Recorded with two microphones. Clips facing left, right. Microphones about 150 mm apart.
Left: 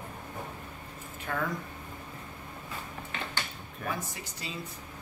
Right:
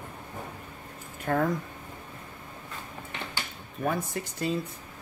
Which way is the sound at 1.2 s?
45° right (ahead or behind).